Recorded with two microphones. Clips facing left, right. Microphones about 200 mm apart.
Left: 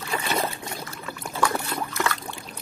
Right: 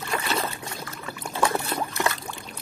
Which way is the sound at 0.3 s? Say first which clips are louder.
Left 2 dB; 15° left (ahead or behind).